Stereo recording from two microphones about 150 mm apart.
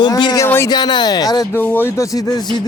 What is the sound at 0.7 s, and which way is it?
Speech, 30° left (ahead or behind).